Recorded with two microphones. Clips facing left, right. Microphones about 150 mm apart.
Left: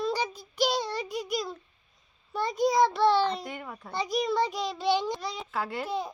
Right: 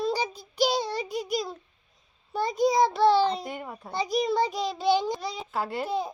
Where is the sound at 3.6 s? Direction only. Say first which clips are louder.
Right 2 dB; 20° right (ahead or behind).